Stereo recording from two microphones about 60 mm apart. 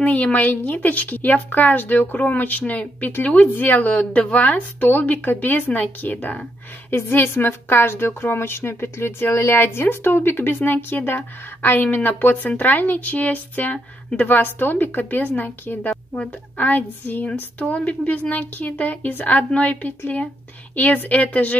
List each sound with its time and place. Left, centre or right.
0.0 s a woman's voice: left